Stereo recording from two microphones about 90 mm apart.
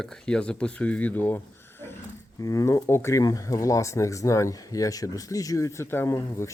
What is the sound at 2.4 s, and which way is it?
Speech, 35° left (ahead or behind).